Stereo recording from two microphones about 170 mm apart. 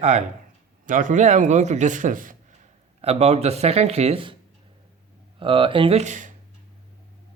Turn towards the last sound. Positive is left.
turn(degrees=-45)  # may be behind; listen again after turning